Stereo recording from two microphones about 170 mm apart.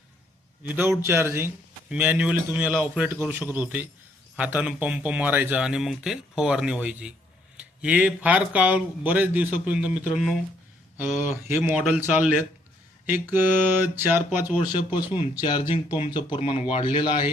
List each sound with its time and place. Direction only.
0.6 s speech: 10° right (ahead or behind)
13.8 s speech: 15° right (ahead or behind)
14.7 s speech: 25° left (ahead or behind)